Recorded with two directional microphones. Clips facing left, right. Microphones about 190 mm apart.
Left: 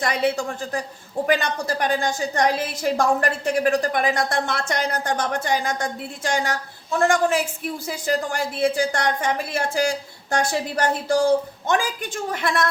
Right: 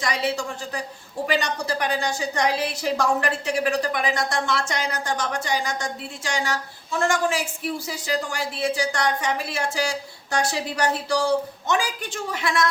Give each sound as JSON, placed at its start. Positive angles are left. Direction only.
{"t": 0.0, "sound": "a woman's voice", "side_deg": 55}